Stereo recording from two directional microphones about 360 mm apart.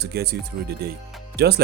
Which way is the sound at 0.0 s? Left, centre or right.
Right.